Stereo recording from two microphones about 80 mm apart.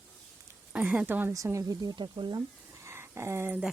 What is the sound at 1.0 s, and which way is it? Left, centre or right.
Speech, right.